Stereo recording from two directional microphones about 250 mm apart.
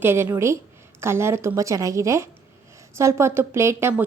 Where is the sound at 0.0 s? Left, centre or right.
Centre.